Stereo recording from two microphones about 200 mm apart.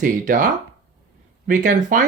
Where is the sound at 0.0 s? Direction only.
40° right (ahead or behind).